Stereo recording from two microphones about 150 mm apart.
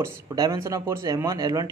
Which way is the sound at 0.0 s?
20° right (ahead or behind).